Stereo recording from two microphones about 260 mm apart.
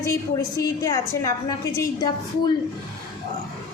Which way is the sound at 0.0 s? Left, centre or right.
Centre.